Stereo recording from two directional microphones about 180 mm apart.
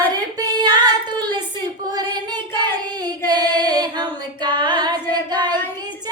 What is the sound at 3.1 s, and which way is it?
Female singing, 20° right (ahead or behind).